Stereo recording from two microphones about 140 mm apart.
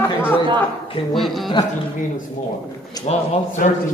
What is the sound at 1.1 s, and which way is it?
Speech, centre (ahead or behind).